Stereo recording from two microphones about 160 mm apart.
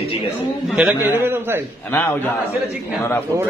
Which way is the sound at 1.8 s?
10° left (ahead or behind).